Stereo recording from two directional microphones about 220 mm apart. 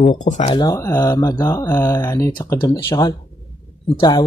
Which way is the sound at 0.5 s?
15° left (ahead or behind).